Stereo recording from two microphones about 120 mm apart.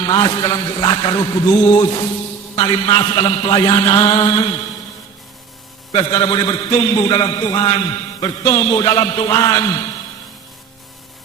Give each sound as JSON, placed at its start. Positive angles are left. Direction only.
{"t": 0.0, "sound": "a man's voice", "side_deg": 40}
{"t": 5.9, "sound": "a man's voice", "side_deg": 40}